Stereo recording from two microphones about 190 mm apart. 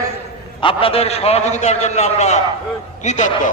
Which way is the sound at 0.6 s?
30° left (ahead or behind).